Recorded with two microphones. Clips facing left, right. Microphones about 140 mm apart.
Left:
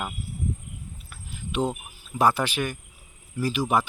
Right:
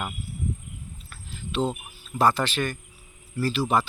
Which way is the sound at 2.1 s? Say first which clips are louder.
Even; 10° left (ahead or behind).